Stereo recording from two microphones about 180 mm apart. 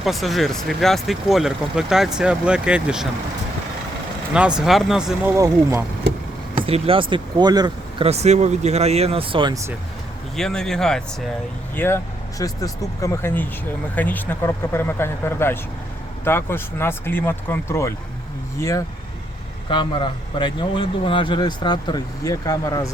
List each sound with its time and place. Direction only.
0.0 s speech: centre (ahead or behind)
4.4 s speech: 5° right (ahead or behind)
6.7 s speech: 30° right (ahead or behind)
8.0 s speech: 35° right (ahead or behind); by 9.7 s 20° right (ahead or behind)
10.3 s speech: 5° left (ahead or behind)
19.7 s speech: 25° left (ahead or behind)